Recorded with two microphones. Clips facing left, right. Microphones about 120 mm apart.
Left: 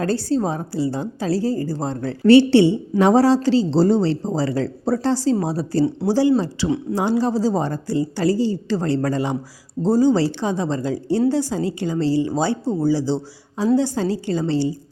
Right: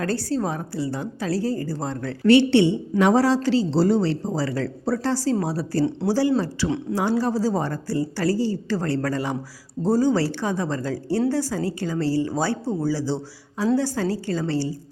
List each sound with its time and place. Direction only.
0.0 s speech: 30° left (ahead or behind)